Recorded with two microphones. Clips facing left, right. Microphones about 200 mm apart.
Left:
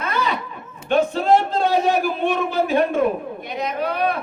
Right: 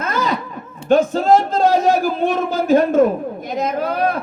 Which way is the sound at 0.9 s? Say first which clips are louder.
Right 4 dB; 45° right (ahead or behind).